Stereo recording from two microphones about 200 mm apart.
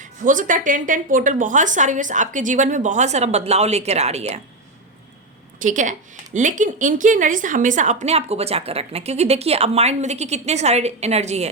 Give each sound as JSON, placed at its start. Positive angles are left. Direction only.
{"t": 0.0, "sound": "a woman's voice", "side_deg": -40}
{"t": 5.5, "sound": "a woman's voice", "side_deg": -40}